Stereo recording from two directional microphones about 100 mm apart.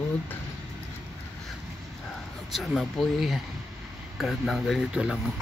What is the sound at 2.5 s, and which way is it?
Speech, centre (ahead or behind).